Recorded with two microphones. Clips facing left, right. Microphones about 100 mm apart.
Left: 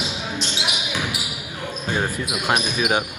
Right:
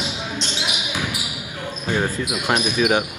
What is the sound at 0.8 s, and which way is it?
Basketball bounce, 15° left (ahead or behind).